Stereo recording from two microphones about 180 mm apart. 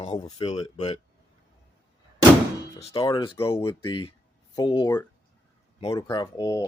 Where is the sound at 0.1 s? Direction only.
20° left (ahead or behind).